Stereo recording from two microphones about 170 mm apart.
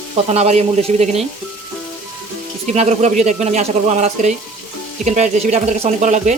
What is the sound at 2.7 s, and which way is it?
Speech, 45° right (ahead or behind).